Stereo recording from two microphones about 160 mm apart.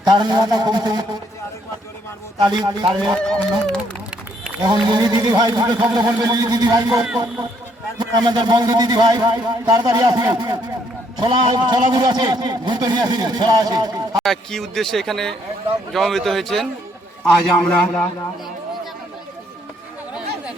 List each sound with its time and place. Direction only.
0.0 s a man's voice: 25° right (ahead or behind)
2.4 s a man's voice: 30° right (ahead or behind)
3.2 s a man's voice: 5° left (ahead or behind)
4.6 s a man's voice: 25° right (ahead or behind)
14.2 s a man's voice: centre (ahead or behind)